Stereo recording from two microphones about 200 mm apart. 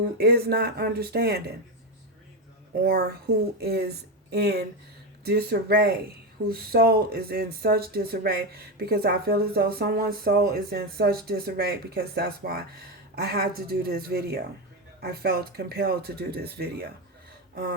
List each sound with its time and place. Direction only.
0.2 s speech: 50° right (ahead or behind)
3.6 s speech: 55° right (ahead or behind)